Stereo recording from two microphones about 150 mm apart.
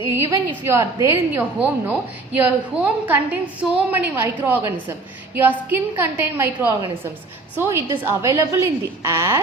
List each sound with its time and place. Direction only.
0.1 s a woman's voice: 20° right (ahead or behind)